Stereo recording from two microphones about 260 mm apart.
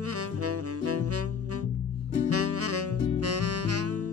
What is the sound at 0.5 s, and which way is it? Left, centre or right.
Saxophone, right.